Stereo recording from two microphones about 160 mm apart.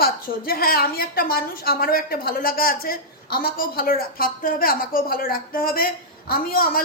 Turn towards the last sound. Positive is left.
turn(degrees=65)  # may be behind; listen again after turning